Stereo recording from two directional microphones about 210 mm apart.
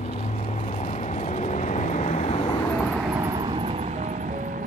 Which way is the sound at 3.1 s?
15° right (ahead or behind).